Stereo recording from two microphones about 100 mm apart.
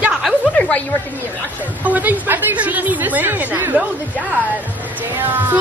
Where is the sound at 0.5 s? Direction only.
10° left (ahead or behind).